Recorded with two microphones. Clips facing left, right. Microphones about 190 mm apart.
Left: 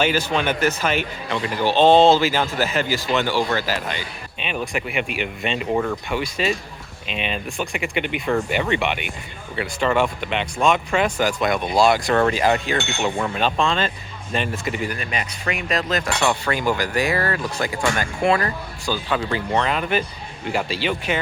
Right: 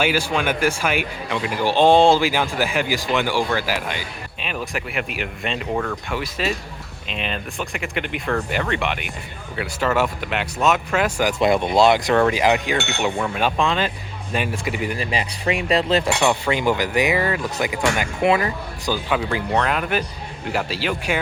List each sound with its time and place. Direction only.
0.0 s speech: 10° right (ahead or behind)
5.7 s speech: 10° left (ahead or behind)
6.1 s speech: centre (ahead or behind)
11.3 s speech: 25° right (ahead or behind)
14.9 s speech: 30° right (ahead or behind)
16.2 s speech: 20° right (ahead or behind)